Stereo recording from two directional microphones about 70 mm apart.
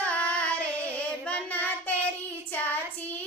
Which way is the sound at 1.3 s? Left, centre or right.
Left.